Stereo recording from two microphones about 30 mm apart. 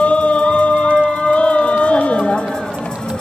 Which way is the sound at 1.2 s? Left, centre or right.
Left.